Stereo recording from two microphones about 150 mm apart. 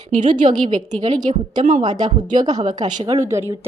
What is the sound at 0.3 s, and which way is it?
A woman's voice, 55° right (ahead or behind).